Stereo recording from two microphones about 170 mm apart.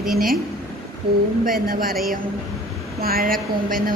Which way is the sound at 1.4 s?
55° right (ahead or behind).